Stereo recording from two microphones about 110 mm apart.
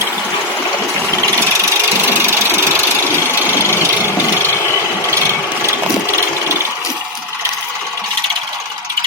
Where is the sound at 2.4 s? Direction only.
20° left (ahead or behind).